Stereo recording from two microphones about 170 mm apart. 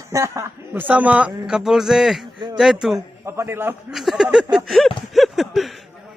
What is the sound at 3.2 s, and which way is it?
Speech, 15° right (ahead or behind).